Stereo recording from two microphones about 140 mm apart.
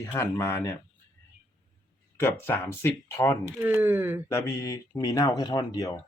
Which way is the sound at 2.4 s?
15° left (ahead or behind).